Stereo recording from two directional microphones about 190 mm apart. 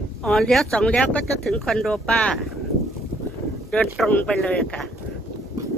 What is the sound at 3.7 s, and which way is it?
Speech, 5° left (ahead or behind).